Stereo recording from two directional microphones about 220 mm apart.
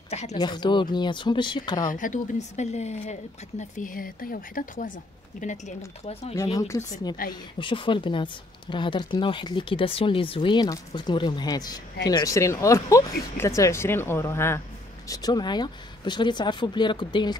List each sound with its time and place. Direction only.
0.1 s a sound: 30° left (ahead or behind)
0.4 s speech: 20° left (ahead or behind)
1.9 s speech: 35° left (ahead or behind)
6.3 s speech: 15° left (ahead or behind)
7.2 s speech: 40° left (ahead or behind)
7.5 s speech: 20° left (ahead or behind)